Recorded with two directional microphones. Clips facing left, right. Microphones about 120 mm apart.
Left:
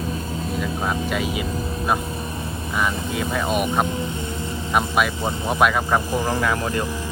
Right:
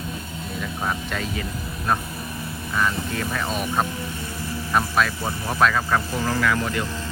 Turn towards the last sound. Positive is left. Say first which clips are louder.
# left 1 dB
turn(degrees=20)  # may be behind; listen again after turning